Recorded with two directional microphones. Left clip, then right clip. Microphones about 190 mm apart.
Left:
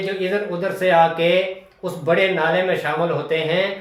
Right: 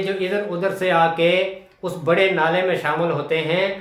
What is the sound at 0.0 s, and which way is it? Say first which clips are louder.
Speech: even; 20° right (ahead or behind).